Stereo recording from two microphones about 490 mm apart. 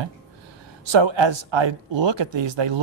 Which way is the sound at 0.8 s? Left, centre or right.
Right.